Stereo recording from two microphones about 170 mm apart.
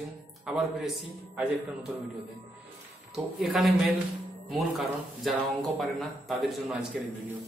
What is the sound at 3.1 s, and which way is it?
Speech, centre (ahead or behind).